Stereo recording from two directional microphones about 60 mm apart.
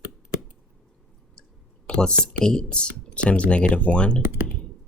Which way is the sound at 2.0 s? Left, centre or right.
Centre.